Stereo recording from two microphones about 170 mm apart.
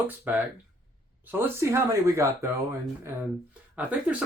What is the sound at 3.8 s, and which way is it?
Speech, 10° right (ahead or behind).